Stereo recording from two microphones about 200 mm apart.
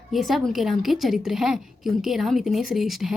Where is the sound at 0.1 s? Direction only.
Centre (ahead or behind).